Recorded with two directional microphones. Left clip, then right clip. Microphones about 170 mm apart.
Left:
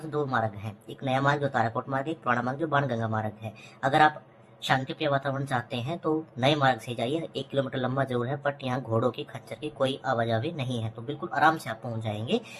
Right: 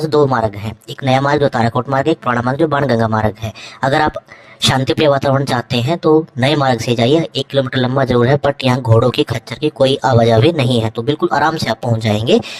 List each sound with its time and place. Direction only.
0.1 s speech: 50° right (ahead or behind)